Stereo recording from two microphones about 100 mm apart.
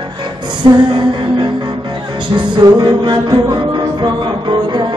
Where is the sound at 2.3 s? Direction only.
50° right (ahead or behind).